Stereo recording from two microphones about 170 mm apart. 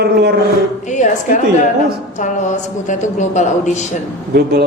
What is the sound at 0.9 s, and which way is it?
A woman's voice, 45° left (ahead or behind).